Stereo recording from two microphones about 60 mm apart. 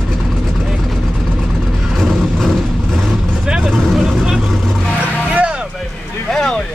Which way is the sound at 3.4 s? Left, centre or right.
Centre.